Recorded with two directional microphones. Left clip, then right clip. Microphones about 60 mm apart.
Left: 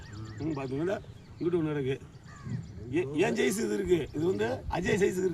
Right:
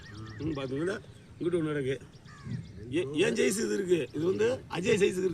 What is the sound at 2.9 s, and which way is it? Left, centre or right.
A man's voice, left.